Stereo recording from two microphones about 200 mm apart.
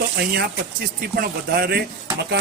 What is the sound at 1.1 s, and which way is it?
Speech, 50° right (ahead or behind).